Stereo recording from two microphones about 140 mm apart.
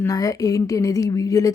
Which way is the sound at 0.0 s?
25° left (ahead or behind).